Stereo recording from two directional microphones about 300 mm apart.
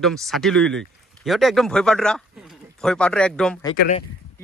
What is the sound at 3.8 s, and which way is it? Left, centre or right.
Speech, left.